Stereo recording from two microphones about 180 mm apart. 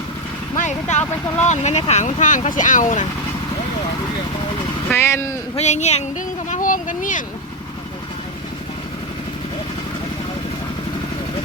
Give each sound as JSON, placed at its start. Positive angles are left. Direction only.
{"t": 0.5, "sound": "speech", "side_deg": 40}
{"t": 4.9, "sound": "speech", "side_deg": 15}
{"t": 5.5, "sound": "speech", "side_deg": 40}